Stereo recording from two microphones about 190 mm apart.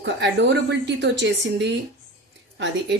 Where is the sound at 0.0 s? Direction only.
65° right (ahead or behind).